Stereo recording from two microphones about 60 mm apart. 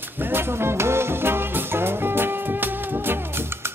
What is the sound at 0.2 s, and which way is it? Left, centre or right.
Music, right.